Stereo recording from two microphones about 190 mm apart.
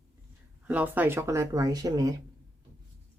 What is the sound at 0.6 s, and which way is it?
Speech, 10° right (ahead or behind).